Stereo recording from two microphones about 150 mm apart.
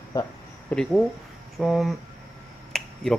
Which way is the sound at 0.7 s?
Centre (ahead or behind).